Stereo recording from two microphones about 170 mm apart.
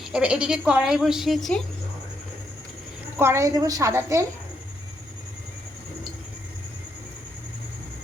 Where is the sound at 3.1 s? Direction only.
15° right (ahead or behind).